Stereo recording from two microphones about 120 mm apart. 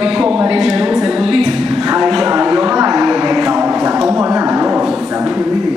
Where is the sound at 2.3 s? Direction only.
25° right (ahead or behind).